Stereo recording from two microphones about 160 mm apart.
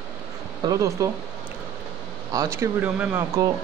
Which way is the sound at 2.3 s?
20° right (ahead or behind).